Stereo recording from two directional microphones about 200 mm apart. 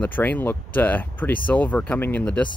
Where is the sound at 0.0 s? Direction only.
10° left (ahead or behind).